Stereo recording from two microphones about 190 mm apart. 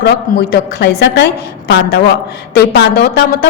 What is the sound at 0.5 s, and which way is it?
A woman's voice, 55° left (ahead or behind).